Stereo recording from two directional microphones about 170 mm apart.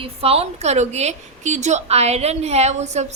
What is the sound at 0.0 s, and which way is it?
A woman's voice, 35° right (ahead or behind).